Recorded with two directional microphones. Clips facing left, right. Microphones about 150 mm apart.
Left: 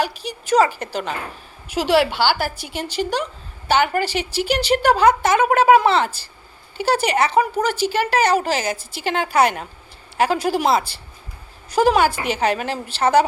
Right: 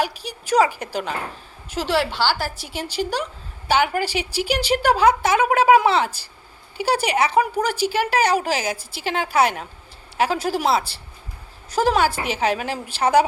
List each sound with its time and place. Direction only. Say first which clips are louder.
0.0 s speech: left 1 dB; 10° right (ahead or behind)
1.7 s a woman's voice: left 5 dB; 15° left (ahead or behind)
2.1 s a woman's voice: left 3 dB; 60° left (ahead or behind)
2.7 s speech: left 1 dB; 10° right (ahead or behind)